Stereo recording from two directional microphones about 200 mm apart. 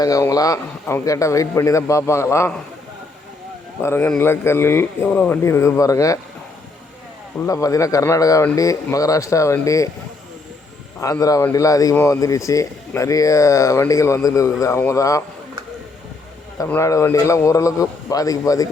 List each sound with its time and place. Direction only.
0.0 s a man's voice: 15° left (ahead or behind)
3.8 s a man's voice: 10° left (ahead or behind)
7.4 s a man's voice: 15° left (ahead or behind)
11.0 s a man's voice: 15° left (ahead or behind)
16.6 s a man's voice: 15° left (ahead or behind)